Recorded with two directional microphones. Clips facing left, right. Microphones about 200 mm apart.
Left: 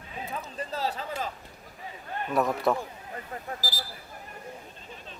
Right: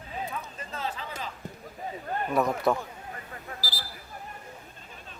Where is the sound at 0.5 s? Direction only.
35° left (ahead or behind).